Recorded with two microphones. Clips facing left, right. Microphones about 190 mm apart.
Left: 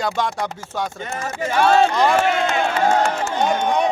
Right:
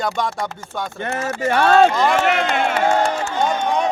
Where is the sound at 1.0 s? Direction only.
60° right (ahead or behind).